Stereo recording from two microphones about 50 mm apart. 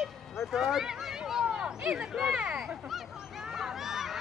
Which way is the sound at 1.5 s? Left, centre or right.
Centre.